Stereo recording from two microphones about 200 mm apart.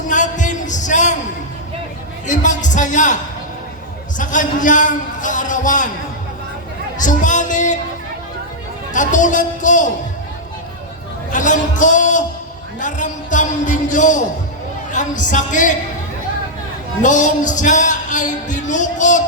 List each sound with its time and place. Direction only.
0.1 s a sound: 40° left (ahead or behind)
2.2 s speech: 40° left (ahead or behind)
4.2 s speech: 40° left (ahead or behind)
7.0 s music: 40° left (ahead or behind)
8.9 s speech: 40° left (ahead or behind)
11.3 s a man's voice: 40° left (ahead or behind)
17.0 s speech: 40° left (ahead or behind)